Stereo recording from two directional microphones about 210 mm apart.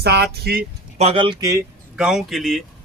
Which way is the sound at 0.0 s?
50° right (ahead or behind).